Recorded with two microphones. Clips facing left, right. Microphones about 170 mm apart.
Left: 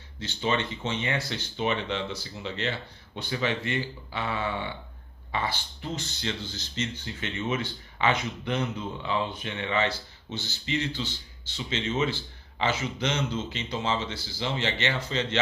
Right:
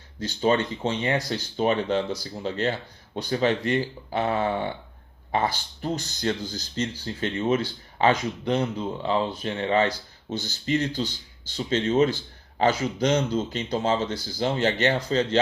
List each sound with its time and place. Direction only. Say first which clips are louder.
0.2 s a man's voice: right 6 dB; 40° right (ahead or behind)